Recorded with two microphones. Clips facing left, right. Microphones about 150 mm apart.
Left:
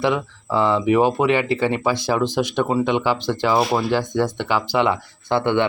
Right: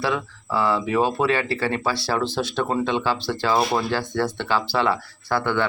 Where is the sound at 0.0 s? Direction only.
20° left (ahead or behind).